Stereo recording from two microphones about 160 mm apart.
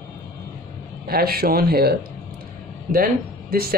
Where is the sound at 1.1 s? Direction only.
70° right (ahead or behind).